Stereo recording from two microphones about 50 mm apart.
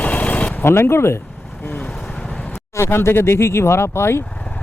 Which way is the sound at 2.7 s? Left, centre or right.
Left.